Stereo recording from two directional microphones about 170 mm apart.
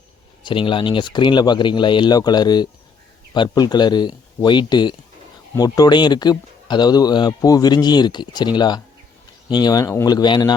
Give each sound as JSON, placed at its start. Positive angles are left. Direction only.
{"t": 0.4, "sound": "speech", "side_deg": 30}